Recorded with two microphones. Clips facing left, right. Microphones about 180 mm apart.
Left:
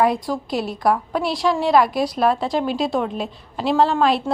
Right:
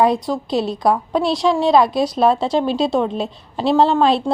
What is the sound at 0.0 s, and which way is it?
A woman's voice, 25° right (ahead or behind).